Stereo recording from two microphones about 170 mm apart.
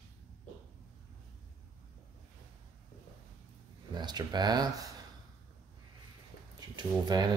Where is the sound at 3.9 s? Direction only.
25° right (ahead or behind).